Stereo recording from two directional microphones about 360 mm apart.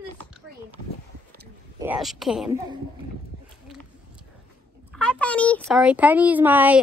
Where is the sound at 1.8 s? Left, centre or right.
Centre.